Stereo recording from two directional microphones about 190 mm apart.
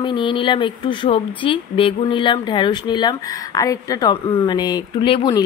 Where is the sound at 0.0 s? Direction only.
25° left (ahead or behind).